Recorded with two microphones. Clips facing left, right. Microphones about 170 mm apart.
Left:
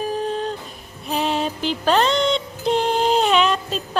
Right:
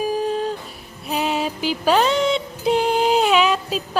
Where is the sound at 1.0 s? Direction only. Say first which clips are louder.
Even; 5° right (ahead or behind).